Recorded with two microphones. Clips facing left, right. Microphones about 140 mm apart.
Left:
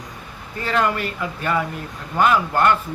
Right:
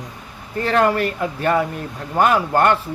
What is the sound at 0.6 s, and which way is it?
A man's voice, 40° right (ahead or behind).